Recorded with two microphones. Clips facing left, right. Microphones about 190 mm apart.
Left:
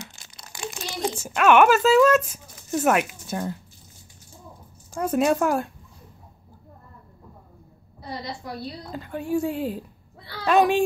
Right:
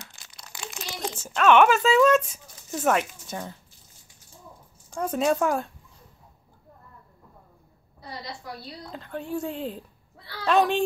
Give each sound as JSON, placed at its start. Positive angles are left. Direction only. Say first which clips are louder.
{"t": 0.0, "sound": "crumpling", "louder": "left 5 dB", "side_deg": 20}
{"t": 1.0, "sound": "speech", "louder": "left 2 dB", "side_deg": 10}
{"t": 4.9, "sound": "speech", "louder": "left 3 dB", "side_deg": 5}
{"t": 8.9, "sound": "speech", "louder": "left 5 dB", "side_deg": 10}